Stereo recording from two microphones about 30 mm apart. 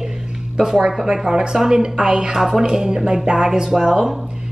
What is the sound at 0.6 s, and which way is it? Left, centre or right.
A woman's voice, right.